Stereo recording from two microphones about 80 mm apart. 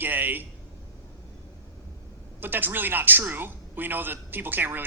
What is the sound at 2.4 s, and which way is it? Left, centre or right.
Speech, right.